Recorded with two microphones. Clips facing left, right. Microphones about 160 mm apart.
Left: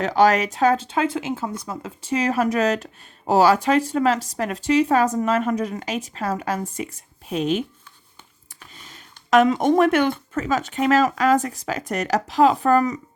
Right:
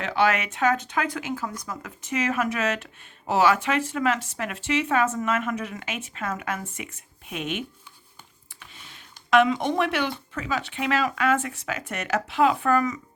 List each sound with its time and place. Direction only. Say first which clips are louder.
0.0 s speech: left 6 dB; 40° left (ahead or behind)